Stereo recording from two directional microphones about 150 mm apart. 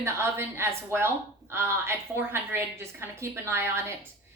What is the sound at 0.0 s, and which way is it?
A woman's voice, 15° right (ahead or behind).